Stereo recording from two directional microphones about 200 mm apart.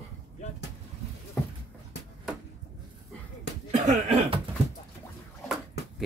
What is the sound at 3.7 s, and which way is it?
Slap, 35° right (ahead or behind).